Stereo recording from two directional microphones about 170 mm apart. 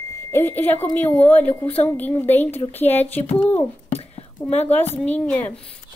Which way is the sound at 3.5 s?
35° left (ahead or behind).